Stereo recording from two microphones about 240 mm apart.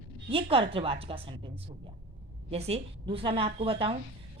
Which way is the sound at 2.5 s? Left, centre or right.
Right.